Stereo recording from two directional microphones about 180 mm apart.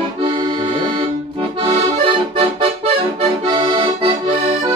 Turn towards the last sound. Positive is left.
turn(degrees=-30)  # may be behind; listen again after turning